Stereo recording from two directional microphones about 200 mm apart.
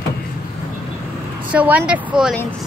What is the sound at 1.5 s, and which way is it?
Speech, 10° right (ahead or behind).